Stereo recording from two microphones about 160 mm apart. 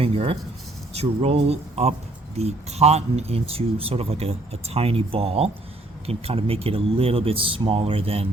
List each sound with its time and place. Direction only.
0.0 s speech: 35° right (ahead or behind)